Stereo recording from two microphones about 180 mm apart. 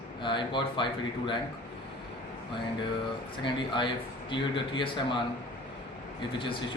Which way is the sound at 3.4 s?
25° left (ahead or behind).